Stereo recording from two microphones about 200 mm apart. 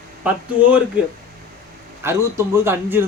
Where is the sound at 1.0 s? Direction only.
5° right (ahead or behind).